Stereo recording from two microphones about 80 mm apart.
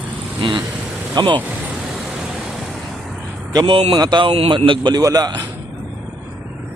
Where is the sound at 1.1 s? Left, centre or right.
Right.